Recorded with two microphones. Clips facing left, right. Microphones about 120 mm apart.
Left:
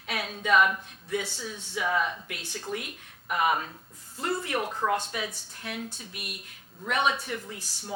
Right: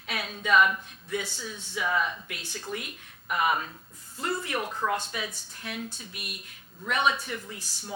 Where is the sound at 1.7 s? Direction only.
45° left (ahead or behind).